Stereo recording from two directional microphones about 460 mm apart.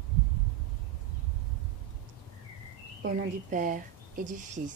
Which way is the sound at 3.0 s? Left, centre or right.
Centre.